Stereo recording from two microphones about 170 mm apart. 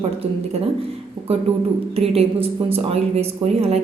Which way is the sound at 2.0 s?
35° right (ahead or behind).